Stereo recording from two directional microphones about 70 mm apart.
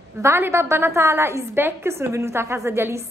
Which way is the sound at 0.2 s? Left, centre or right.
Right.